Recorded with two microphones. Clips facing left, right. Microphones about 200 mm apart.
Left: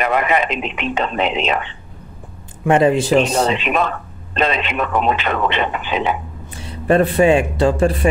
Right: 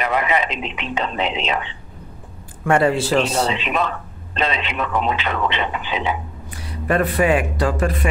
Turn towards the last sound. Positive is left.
turn(degrees=25)  # may be behind; listen again after turning